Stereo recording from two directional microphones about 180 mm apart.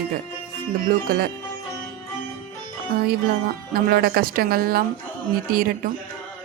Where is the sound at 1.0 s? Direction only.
55° right (ahead or behind).